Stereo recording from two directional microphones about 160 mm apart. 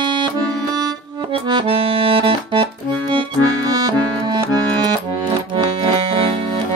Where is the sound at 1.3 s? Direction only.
30° right (ahead or behind).